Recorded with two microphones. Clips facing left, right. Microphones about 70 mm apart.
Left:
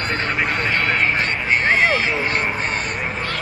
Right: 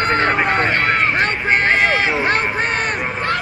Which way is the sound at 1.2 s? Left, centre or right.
Right.